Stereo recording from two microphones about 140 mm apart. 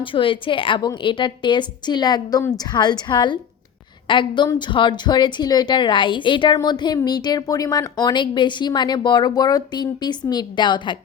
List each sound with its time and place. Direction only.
0.0 s a woman's voice: 40° left (ahead or behind)